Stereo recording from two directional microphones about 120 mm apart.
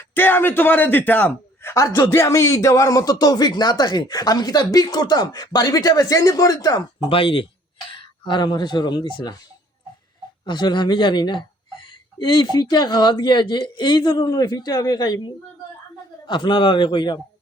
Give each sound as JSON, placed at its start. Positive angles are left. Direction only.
{"t": 0.1, "sound": "a man's voice", "side_deg": 15}
{"t": 7.1, "sound": "speech", "side_deg": 50}
{"t": 10.4, "sound": "speech", "side_deg": 40}
{"t": 16.2, "sound": "speech", "side_deg": 40}